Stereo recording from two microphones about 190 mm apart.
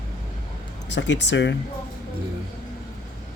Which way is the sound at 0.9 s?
70° left (ahead or behind).